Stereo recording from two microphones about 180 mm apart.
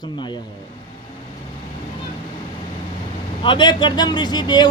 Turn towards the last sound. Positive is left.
turn(degrees=25)  # may be behind; listen again after turning